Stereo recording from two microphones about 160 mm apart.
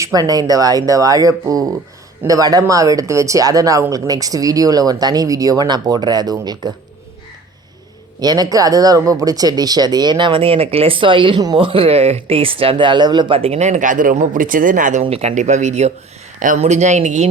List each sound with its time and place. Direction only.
0.0 s speech: 25° right (ahead or behind)
8.2 s speech: 25° right (ahead or behind); by 15.0 s 55° right (ahead or behind)
15.0 s speech: 40° right (ahead or behind)